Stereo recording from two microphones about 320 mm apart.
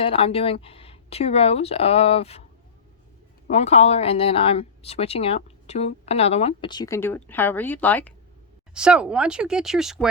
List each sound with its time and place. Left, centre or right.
0.0 s speech: centre
3.4 s speech: centre